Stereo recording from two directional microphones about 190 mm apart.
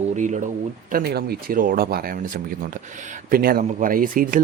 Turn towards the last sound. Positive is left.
turn(degrees=-45)  # may be behind; listen again after turning